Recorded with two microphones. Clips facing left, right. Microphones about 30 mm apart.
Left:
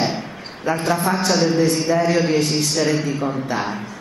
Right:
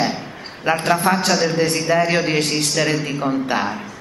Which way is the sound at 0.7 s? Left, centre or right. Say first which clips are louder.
Right 3 dB; right.